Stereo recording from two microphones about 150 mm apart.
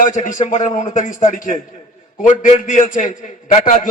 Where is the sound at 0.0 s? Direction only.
55° left (ahead or behind).